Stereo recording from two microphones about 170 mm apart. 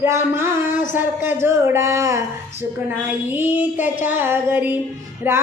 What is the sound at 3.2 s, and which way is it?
Speech, 10° right (ahead or behind).